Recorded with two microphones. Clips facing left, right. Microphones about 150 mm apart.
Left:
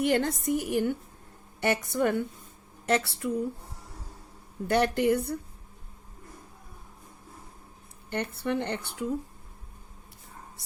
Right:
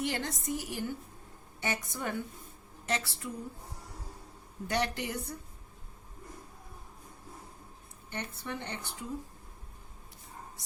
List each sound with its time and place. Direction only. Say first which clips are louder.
0.0 s speech: left 9 dB; 55° left (ahead or behind)
2.8 s speech: left 8 dB; 55° left (ahead or behind)
4.7 s a woman's voice: left 9 dB; 55° left (ahead or behind)
8.1 s speech: left 10 dB; 65° left (ahead or behind)